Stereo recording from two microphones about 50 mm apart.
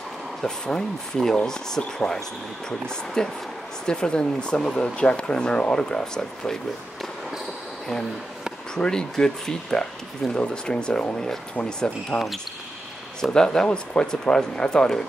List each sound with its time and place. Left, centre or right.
0.4 s speech: centre
8.7 s speech: centre
12.1 s speech: centre